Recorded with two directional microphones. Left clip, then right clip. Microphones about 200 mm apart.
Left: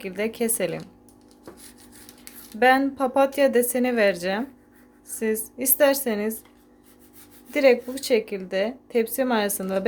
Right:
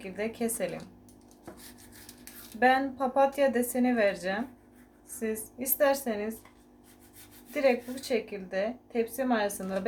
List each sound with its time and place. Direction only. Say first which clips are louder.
0.0 s speech: left 7 dB; 45° left (ahead or behind)
2.6 s speech: left 6 dB; 45° left (ahead or behind)
7.5 s speech: left 8 dB; 50° left (ahead or behind)